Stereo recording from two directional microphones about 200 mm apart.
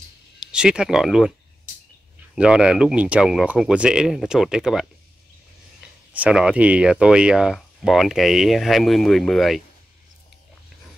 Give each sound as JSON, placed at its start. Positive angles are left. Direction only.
{"t": 0.4, "sound": "speech", "side_deg": -5}
{"t": 2.3, "sound": "speech", "side_deg": -5}
{"t": 6.1, "sound": "speech", "side_deg": -5}